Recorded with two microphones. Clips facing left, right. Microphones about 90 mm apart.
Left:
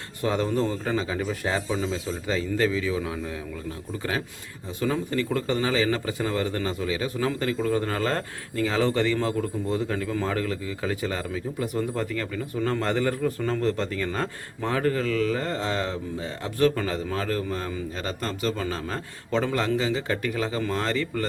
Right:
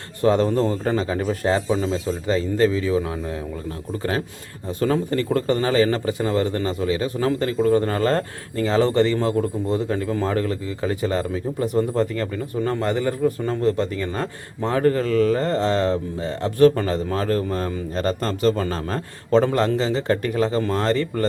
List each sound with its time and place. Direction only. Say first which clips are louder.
0.2 s a man's voice: right 6 dB; 35° right (ahead or behind)
4.8 s a man's voice: right 5 dB; 45° right (ahead or behind)